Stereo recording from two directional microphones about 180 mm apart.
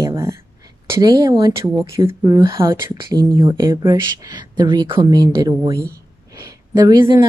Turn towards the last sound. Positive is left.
turn(degrees=-20)  # may be behind; listen again after turning